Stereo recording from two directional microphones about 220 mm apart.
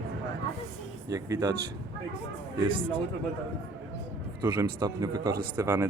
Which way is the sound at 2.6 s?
25° right (ahead or behind).